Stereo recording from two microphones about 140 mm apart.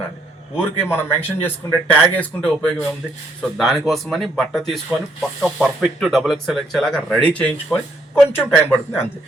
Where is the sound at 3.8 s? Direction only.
Centre (ahead or behind).